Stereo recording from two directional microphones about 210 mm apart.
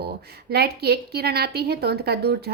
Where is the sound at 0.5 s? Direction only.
50° right (ahead or behind).